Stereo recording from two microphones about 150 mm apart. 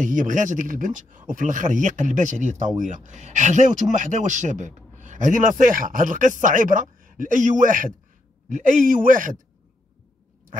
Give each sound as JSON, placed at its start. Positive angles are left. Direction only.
{"t": 0.0, "sound": "speech", "side_deg": -55}